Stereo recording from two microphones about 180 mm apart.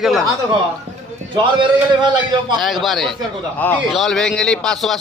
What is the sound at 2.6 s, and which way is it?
Speech, centre (ahead or behind).